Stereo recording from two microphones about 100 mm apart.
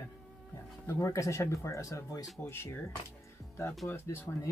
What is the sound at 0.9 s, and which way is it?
Speech, 30° left (ahead or behind).